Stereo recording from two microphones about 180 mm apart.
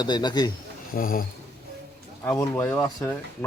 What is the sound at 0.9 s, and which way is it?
Speech, 50° left (ahead or behind).